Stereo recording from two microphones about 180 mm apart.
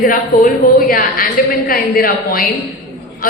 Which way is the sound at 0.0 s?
50° left (ahead or behind).